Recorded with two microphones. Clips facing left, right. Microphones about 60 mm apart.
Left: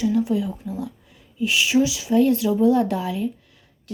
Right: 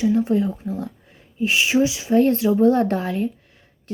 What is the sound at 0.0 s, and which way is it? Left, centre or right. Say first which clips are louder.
Speech: right 2 dB; right.